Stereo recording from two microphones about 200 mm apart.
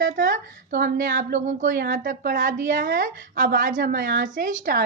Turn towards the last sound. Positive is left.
turn(degrees=-45)  # may be behind; listen again after turning